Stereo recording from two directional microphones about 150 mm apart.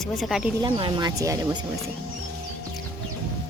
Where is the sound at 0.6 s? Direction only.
30° right (ahead or behind).